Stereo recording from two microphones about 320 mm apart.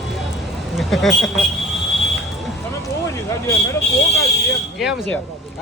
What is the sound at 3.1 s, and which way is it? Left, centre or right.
Speech, centre.